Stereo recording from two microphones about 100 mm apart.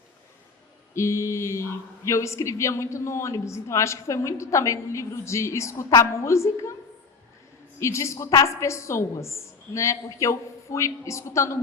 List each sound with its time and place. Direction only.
0.9 s a woman's voice: 30° left (ahead or behind)
7.8 s a woman's voice: 30° left (ahead or behind)